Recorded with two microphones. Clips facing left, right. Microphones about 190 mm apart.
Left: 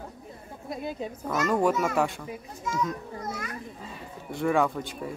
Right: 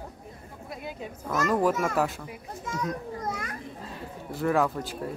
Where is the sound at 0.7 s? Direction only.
25° left (ahead or behind).